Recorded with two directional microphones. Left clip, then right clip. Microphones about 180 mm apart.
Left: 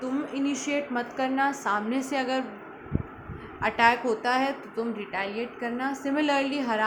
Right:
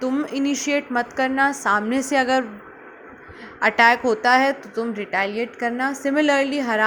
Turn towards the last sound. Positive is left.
turn(degrees=-35)  # may be behind; listen again after turning